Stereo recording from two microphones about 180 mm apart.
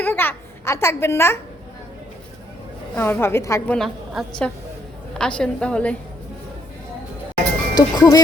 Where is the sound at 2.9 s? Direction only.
10° left (ahead or behind).